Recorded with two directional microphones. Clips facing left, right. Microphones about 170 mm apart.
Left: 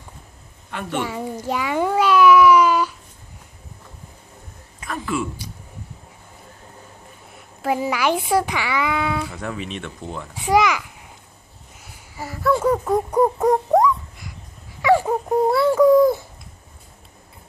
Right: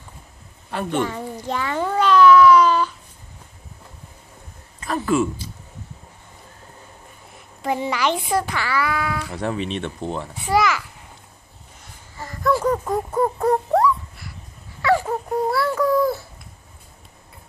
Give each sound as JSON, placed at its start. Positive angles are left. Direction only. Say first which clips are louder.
{"t": 0.7, "sound": "a woman's voice", "louder": "right 3 dB", "side_deg": -35}
{"t": 1.0, "sound": "a child's voice", "louder": "even", "side_deg": 10}
{"t": 1.4, "sound": "babbling", "louder": "left 2 dB", "side_deg": 10}
{"t": 4.8, "sound": "speech", "louder": "right 5 dB", "side_deg": -40}
{"t": 7.6, "sound": "a child's voice", "louder": "left 1 dB", "side_deg": 5}
{"t": 9.3, "sound": "speech", "louder": "right 4 dB", "side_deg": -30}
{"t": 10.4, "sound": "a child's voice", "louder": "left 2 dB", "side_deg": 15}
{"t": 11.8, "sound": "a sound", "louder": "left 3 dB", "side_deg": 10}